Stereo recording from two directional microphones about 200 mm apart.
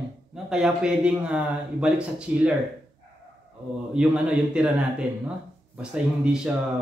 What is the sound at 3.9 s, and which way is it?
Speech, 5° right (ahead or behind).